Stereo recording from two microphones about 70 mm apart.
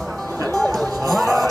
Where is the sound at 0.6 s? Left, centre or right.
Centre.